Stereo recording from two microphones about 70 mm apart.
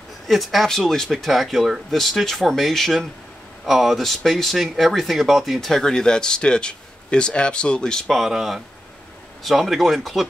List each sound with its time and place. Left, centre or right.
0.3 s speech: centre
8.2 s speech: centre